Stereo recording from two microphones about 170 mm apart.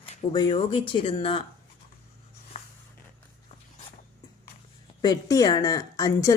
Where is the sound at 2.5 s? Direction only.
40° left (ahead or behind).